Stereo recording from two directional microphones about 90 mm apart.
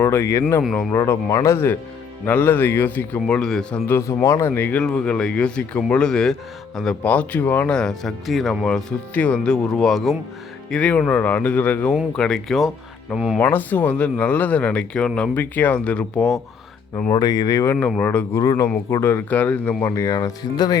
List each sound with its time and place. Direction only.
0.0 s speech: 30° left (ahead or behind); by 3.8 s 5° left (ahead or behind)
3.8 s speech: 30° left (ahead or behind)
7.7 s speech: 5° left (ahead or behind)
10.7 s speech: 15° left (ahead or behind)
12.1 s speech: 5° left (ahead or behind)
13.4 s speech: 20° left (ahead or behind)
15.4 s speech: 20° left (ahead or behind)
17.1 s speech: 45° left (ahead or behind)
17.9 s speech: 15° left (ahead or behind)
18.3 s speech: 40° left (ahead or behind)
18.9 s speech: 30° left (ahead or behind)
20.0 s speech: 40° left (ahead or behind)